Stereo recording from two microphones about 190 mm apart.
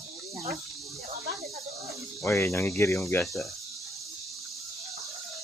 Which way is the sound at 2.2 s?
15° left (ahead or behind).